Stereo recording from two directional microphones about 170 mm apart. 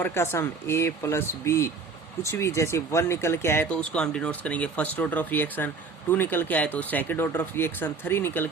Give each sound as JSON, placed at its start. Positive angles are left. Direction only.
{"t": 0.0, "sound": "speech", "side_deg": 15}